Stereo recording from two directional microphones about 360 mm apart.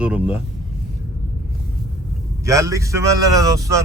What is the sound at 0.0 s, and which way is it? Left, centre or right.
Speech, centre.